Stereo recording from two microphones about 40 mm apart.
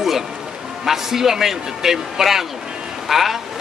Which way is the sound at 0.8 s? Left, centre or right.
Centre.